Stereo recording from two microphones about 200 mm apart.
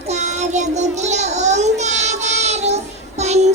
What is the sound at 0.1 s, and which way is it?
Child singing, 35° right (ahead or behind).